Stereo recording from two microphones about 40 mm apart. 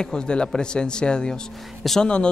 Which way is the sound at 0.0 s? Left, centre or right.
Centre.